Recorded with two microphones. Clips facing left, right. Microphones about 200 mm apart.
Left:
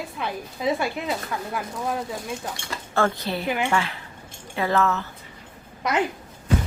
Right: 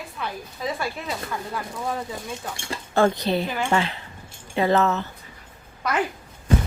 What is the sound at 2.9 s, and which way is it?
Speech, 20° right (ahead or behind).